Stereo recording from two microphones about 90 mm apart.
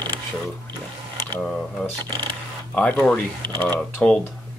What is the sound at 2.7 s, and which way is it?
Speech, 10° left (ahead or behind).